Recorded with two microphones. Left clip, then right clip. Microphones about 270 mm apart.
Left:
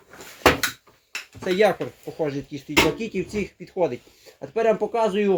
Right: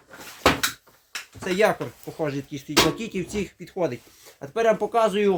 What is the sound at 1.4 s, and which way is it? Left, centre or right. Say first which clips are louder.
Speech: left 2 dB; right.